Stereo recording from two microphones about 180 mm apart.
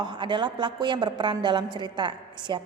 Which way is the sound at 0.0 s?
25° right (ahead or behind).